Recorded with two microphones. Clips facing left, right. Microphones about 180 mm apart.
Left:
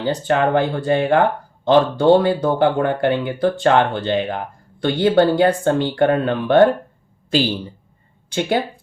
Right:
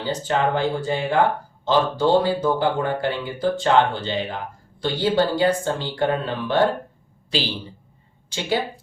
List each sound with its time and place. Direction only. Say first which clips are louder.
0.0 s speech: left 4 dB; 60° left (ahead or behind)